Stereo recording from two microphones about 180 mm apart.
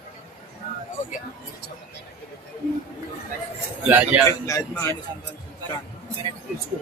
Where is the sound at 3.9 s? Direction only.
10° right (ahead or behind).